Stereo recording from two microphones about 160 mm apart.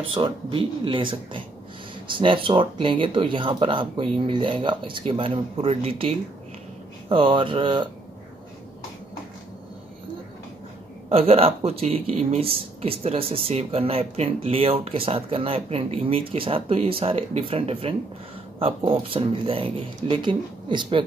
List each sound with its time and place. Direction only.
0.1 s speech: 35° right (ahead or behind)
11.1 s speech: 40° right (ahead or behind)